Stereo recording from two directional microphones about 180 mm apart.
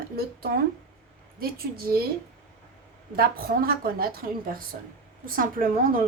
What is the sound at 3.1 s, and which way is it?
A woman's voice, 55° right (ahead or behind).